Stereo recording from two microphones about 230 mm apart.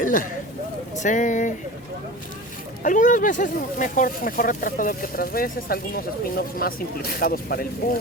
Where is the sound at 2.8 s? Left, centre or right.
Left.